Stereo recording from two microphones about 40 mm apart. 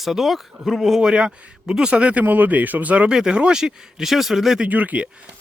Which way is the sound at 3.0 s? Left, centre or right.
Centre.